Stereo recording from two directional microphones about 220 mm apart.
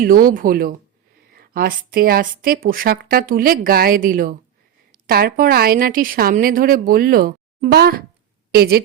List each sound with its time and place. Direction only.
0.0 s a woman's voice: 40° right (ahead or behind)